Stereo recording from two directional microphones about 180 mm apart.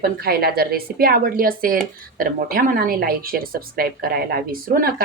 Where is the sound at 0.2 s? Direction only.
60° right (ahead or behind).